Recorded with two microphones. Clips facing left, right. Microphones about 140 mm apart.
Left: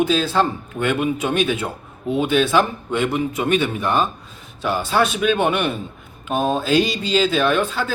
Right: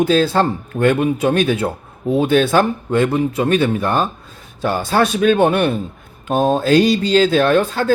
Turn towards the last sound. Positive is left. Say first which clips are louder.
# right 4 dB
turn(degrees=-45)  # may be behind; listen again after turning